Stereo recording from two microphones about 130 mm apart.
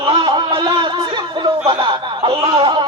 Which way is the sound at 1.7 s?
40° right (ahead or behind).